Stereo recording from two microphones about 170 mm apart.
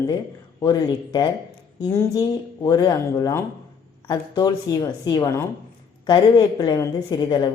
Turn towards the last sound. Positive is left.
turn(degrees=25)  # may be behind; listen again after turning